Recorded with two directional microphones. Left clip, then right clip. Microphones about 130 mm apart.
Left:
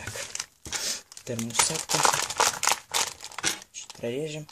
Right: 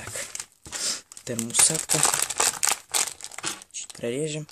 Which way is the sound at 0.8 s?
40° right (ahead or behind).